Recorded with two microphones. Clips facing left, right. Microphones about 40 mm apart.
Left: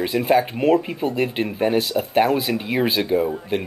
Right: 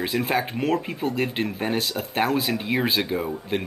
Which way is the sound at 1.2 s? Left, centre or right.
Centre.